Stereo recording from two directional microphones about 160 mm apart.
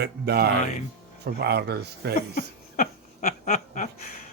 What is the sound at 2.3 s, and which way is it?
Laughter, 55° left (ahead or behind).